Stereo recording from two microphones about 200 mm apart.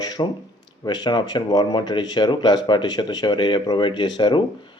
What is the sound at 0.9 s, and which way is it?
Speech, 20° left (ahead or behind).